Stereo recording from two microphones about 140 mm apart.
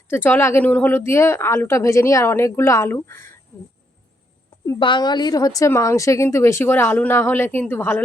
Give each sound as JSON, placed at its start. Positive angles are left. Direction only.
{"t": 0.1, "sound": "speech", "side_deg": 15}
{"t": 4.8, "sound": "speech", "side_deg": 35}